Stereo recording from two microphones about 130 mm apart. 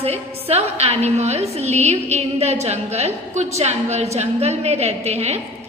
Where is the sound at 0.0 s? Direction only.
50° right (ahead or behind).